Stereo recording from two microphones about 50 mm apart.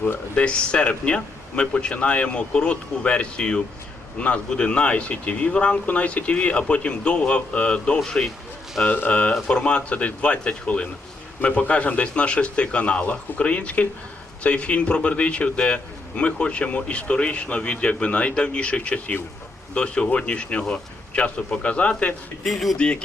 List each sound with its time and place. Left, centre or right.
0.3 s a man's voice: left
22.4 s speech: centre